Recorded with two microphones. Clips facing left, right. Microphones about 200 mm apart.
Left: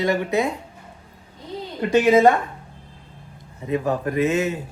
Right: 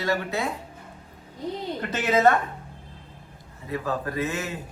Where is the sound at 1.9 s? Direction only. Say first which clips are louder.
Left 6 dB; 15° left (ahead or behind).